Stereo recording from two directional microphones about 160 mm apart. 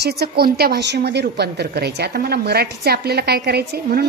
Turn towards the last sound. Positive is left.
turn(degrees=-80)